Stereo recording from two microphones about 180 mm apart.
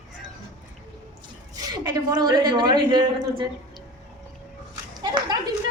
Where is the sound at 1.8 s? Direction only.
20° right (ahead or behind).